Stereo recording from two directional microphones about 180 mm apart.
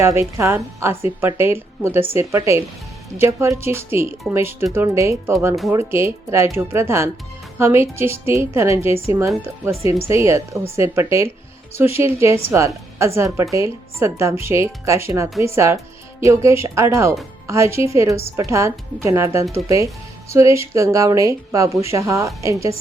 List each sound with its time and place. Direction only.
0.0 s a woman's voice: 15° right (ahead or behind)